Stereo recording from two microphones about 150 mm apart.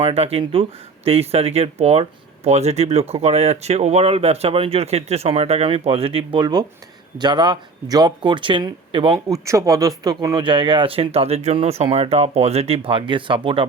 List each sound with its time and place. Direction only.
0.0 s speech: 40° right (ahead or behind)
9.1 s speech: 20° right (ahead or behind); by 13.7 s 35° right (ahead or behind)